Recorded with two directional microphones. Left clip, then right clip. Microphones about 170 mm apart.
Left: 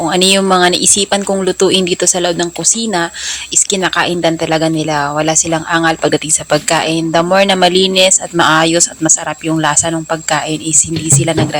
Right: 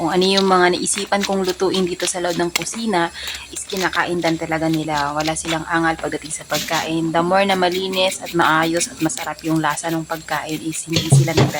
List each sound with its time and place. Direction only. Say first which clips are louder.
0.0 s a woman's voice: left 5 dB; 20° left (ahead or behind)